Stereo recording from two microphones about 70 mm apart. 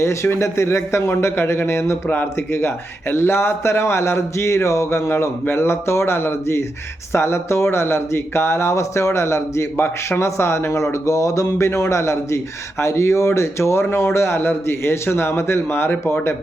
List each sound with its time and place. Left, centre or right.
0.0 s speech: left